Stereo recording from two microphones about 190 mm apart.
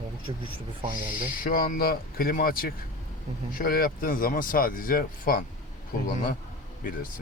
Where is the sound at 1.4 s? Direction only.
50° left (ahead or behind).